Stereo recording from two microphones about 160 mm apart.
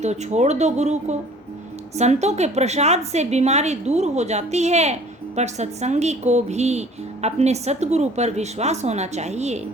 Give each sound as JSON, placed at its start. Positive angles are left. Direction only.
{"t": 0.0, "sound": "speech", "side_deg": -45}